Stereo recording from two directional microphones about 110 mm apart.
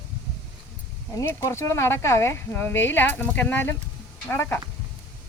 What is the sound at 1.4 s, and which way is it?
Speech, 25° left (ahead or behind).